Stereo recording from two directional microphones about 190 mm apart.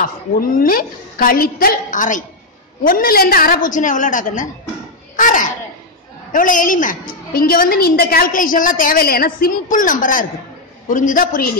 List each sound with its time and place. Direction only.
0.0 s a woman's voice: 50° left (ahead or behind)
5.1 s a sound: 45° left (ahead or behind)
6.3 s a woman's voice: 45° left (ahead or behind)